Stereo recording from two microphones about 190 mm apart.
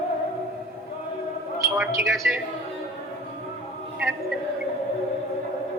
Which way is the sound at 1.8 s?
5° right (ahead or behind).